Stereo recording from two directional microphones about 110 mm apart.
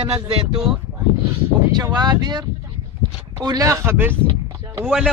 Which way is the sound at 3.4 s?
30° right (ahead or behind).